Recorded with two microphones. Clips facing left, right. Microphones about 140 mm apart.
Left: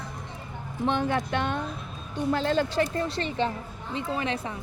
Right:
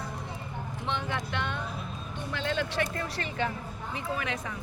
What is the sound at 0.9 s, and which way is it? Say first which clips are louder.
Speech: left 8 dB; 50° left (ahead or behind).